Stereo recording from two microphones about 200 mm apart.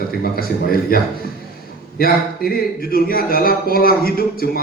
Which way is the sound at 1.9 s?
50° left (ahead or behind).